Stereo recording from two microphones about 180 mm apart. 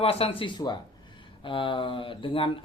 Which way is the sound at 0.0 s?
30° left (ahead or behind).